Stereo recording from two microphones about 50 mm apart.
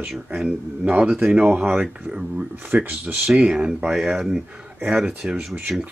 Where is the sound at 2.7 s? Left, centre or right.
Right.